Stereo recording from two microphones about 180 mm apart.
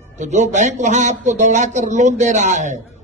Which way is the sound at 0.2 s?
40° right (ahead or behind).